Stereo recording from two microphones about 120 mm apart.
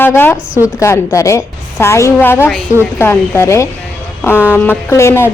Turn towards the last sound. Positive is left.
turn(degrees=20)  # may be behind; listen again after turning